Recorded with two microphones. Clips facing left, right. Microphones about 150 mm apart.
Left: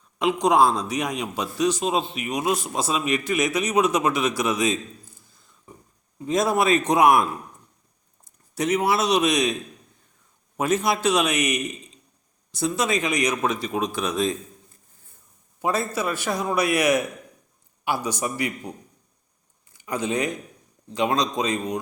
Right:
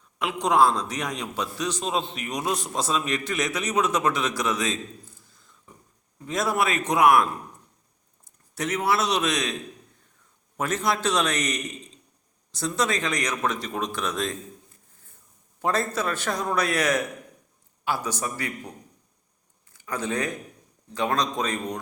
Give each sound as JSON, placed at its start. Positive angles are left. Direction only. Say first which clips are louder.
{"t": 0.2, "sound": "a man's voice", "louder": "left 2 dB", "side_deg": 15}
{"t": 8.5, "sound": "a man's voice", "louder": "left 3 dB", "side_deg": 15}
{"t": 10.6, "sound": "a man's voice", "louder": "left 4 dB", "side_deg": 10}
{"t": 15.6, "sound": "a man's voice", "louder": "left 1 dB", "side_deg": 10}
{"t": 19.7, "sound": "a man's voice", "louder": "left 3 dB", "side_deg": 15}